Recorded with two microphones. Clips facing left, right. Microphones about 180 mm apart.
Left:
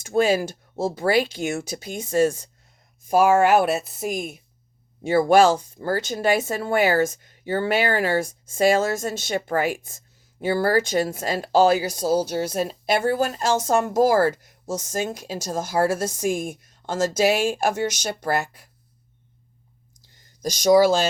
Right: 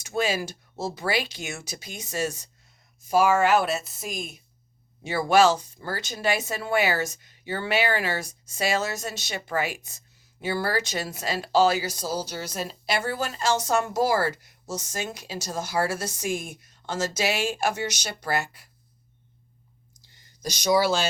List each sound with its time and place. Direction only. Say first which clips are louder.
0.0 s speech: left 7 dB; 50° left (ahead or behind)
20.4 s speech: left 7 dB; 45° left (ahead or behind)